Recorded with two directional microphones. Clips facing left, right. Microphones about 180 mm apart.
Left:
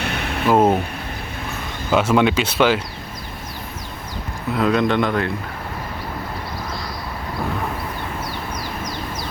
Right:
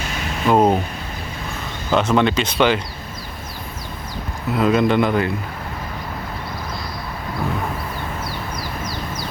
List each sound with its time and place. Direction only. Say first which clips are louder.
0.0 s a sound: left 3 dB; 65° left (ahead or behind)
0.4 s speech: even; 5° left (ahead or behind)
1.9 s speech: left 1 dB; 10° left (ahead or behind)
4.5 s speech: right 2 dB; centre (ahead or behind)